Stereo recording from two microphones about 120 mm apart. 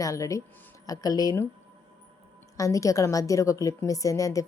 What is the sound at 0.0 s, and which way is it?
A woman's voice, 25° left (ahead or behind).